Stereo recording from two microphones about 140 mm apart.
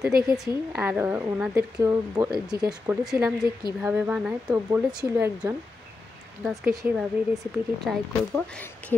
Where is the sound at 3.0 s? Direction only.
5° right (ahead or behind).